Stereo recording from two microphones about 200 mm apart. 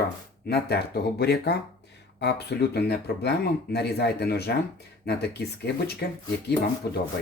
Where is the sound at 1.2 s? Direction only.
55° left (ahead or behind).